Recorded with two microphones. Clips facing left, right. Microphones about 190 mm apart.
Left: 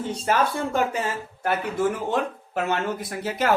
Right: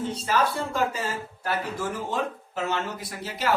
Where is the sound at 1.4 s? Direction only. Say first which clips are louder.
Left 7 dB; 60° left (ahead or behind).